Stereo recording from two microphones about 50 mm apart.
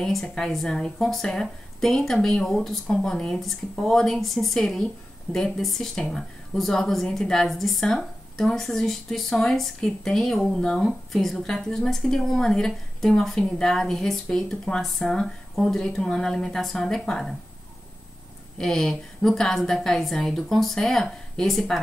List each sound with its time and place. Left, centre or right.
0.0 s speech: centre
10.8 s speech: centre
14.8 s speech: centre
18.6 s speech: centre